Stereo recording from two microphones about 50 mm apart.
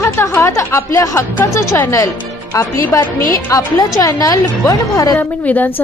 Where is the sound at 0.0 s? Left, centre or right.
Left.